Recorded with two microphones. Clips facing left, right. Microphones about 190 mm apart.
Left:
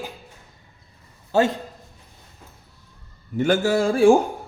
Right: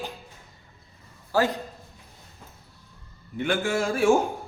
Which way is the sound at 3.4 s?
40° left (ahead or behind).